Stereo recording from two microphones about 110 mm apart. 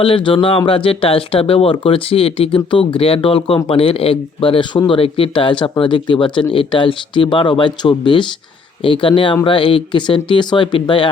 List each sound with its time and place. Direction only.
0.0 s speech: 50° left (ahead or behind)